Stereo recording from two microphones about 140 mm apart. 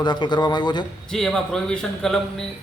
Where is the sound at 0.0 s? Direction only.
30° left (ahead or behind).